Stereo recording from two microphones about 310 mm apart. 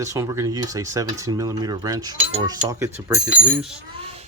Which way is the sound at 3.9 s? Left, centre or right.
Centre.